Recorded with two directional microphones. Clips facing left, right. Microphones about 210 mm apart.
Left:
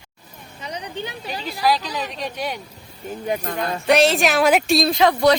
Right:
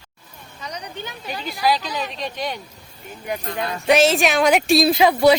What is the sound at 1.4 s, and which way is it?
Speech, centre (ahead or behind).